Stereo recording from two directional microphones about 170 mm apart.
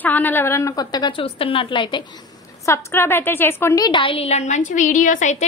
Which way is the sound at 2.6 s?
15° left (ahead or behind).